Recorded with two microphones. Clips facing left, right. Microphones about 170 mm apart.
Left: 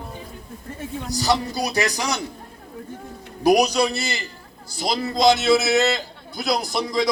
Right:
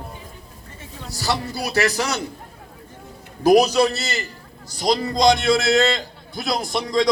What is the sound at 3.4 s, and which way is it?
A man's voice, 10° left (ahead or behind).